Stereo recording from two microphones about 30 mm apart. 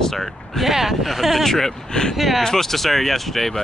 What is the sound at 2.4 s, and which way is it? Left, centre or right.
Speech, centre.